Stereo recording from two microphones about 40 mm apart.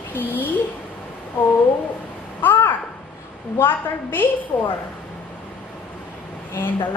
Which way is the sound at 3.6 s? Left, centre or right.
Left.